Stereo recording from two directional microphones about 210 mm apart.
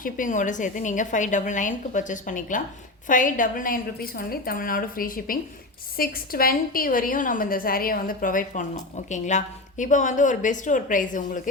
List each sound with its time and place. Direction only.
0.0 s a woman's voice: 40° left (ahead or behind)